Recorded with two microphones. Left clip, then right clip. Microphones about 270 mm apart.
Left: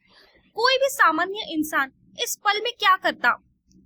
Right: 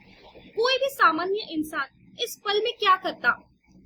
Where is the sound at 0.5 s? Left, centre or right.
Left.